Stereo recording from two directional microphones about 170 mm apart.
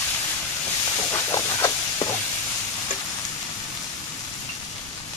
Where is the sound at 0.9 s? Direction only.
20° left (ahead or behind).